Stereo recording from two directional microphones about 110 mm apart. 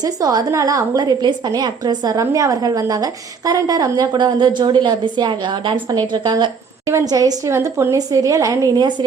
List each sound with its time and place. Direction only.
0.0 s a woman's voice: 35° right (ahead or behind)
6.8 s a woman's voice: 35° right (ahead or behind)